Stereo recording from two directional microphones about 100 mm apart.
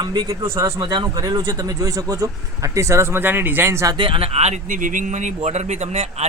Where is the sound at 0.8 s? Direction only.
50° right (ahead or behind); by 3.9 s 30° right (ahead or behind).